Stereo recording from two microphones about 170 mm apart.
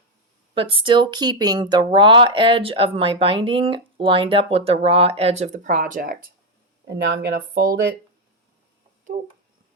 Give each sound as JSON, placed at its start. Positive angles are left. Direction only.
{"t": 0.5, "sound": "speech", "side_deg": -30}
{"t": 6.8, "sound": "speech", "side_deg": -90}